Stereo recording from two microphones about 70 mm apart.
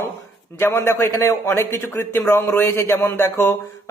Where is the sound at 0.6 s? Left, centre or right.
Left.